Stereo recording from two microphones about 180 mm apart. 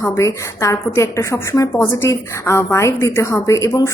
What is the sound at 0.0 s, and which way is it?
A woman's voice, 15° left (ahead or behind).